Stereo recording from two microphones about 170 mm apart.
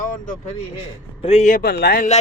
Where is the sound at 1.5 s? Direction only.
65° left (ahead or behind).